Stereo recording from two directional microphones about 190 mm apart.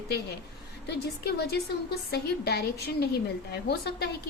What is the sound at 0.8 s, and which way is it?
A woman's voice, 60° left (ahead or behind).